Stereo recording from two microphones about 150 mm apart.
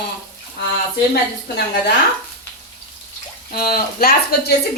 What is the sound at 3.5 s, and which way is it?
Speech, 90° left.